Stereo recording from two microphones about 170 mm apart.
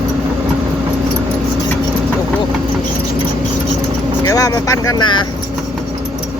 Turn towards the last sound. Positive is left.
turn(degrees=25)  # may be behind; listen again after turning